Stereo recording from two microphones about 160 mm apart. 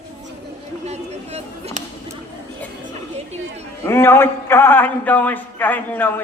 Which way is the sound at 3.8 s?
15° left (ahead or behind).